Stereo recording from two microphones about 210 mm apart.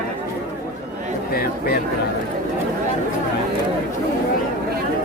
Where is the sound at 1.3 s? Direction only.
45° left (ahead or behind).